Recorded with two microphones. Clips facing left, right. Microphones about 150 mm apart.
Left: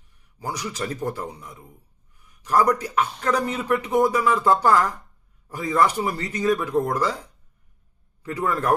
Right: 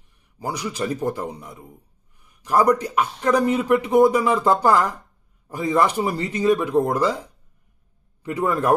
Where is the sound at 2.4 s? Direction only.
30° right (ahead or behind); by 4.9 s 10° right (ahead or behind).